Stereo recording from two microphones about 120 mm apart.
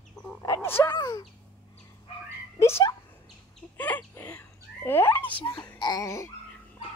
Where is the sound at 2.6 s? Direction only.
20° left (ahead or behind).